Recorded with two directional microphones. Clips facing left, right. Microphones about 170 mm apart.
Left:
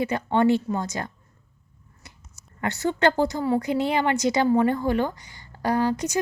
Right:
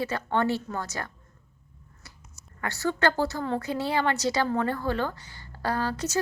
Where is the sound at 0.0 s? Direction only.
15° left (ahead or behind).